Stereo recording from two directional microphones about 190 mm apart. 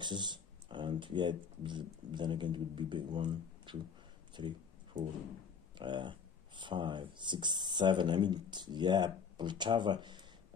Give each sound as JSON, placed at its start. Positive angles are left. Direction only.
{"t": 0.0, "sound": "speech", "side_deg": -25}
{"t": 4.9, "sound": "a sound", "side_deg": -40}
{"t": 5.8, "sound": "speech", "side_deg": -25}